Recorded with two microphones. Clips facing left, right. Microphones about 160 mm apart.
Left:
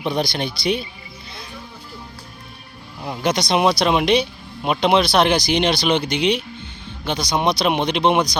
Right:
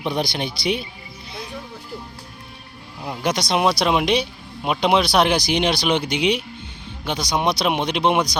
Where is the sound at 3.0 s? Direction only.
Centre (ahead or behind).